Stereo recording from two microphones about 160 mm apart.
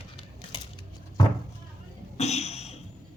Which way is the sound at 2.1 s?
40° left (ahead or behind).